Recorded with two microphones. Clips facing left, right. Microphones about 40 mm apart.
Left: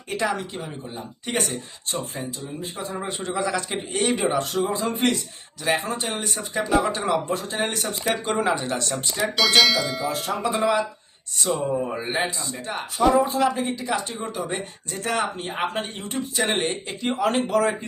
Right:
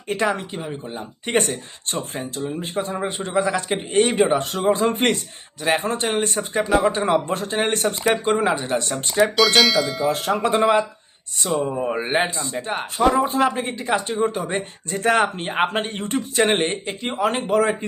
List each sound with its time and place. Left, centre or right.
0.1 s a man's voice: right
0.9 s speech: right
1.5 s speech: right
3.2 s a man's voice: right
4.5 s speech: right
6.7 s speech: centre
6.9 s speech: right
8.1 s a man's voice: right
9.3 s speech: centre
10.1 s speech: right
10.6 s a man's voice: right
11.4 s speech: centre
11.8 s speech: right; by 17.4 s centre
17.5 s a man's voice: right